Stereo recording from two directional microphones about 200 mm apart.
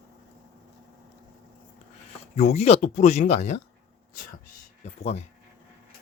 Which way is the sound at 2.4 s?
35° left (ahead or behind).